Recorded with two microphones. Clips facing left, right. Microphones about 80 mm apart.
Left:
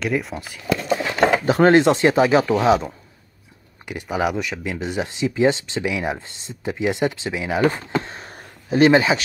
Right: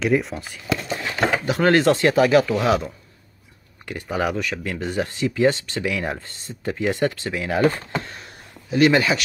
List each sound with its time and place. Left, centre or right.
0.0 s speech: centre
1.4 s speech: left
1.7 s speech: left
8.1 s a sound: left